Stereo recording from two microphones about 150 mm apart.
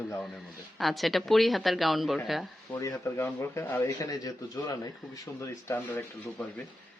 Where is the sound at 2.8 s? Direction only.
20° left (ahead or behind).